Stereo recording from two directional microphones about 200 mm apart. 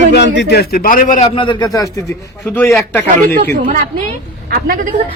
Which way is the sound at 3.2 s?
50° right (ahead or behind).